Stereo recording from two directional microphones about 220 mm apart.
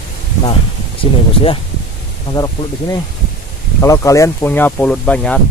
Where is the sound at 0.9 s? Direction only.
25° left (ahead or behind); by 5.4 s 5° left (ahead or behind).